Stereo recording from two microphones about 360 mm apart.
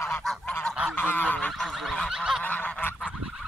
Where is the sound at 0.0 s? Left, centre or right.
Centre.